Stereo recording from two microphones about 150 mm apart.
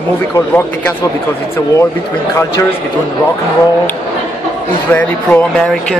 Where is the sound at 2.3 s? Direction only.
20° left (ahead or behind).